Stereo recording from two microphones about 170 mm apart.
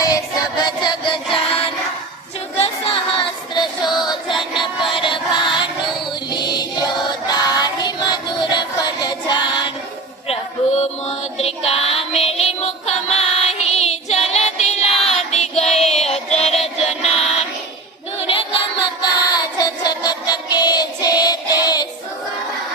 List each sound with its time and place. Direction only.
0.0 s music: 25° left (ahead or behind)
2.6 s child singing: 30° left (ahead or behind)
6.3 s music: 25° left (ahead or behind)
7.3 s child singing: 25° left (ahead or behind)
10.8 s music: 40° left (ahead or behind)
16.9 s child singing: 35° left (ahead or behind)